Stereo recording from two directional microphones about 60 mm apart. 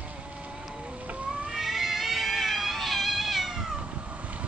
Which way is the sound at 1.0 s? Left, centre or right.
Right.